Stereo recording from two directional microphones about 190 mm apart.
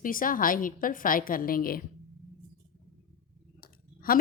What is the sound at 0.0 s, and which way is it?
Speech, 45° left (ahead or behind).